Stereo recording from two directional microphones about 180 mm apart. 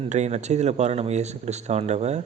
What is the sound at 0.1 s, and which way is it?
Speech, 40° right (ahead or behind).